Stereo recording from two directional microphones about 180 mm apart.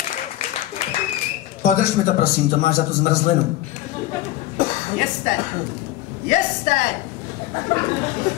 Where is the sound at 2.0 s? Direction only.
50° left (ahead or behind).